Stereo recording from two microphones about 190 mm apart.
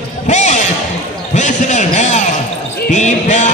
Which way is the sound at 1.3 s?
40° left (ahead or behind).